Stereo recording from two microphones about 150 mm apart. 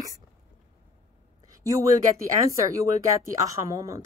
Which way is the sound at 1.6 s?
20° right (ahead or behind).